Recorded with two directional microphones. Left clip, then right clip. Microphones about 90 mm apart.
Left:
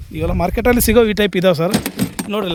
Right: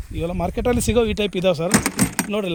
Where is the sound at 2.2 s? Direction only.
25° left (ahead or behind).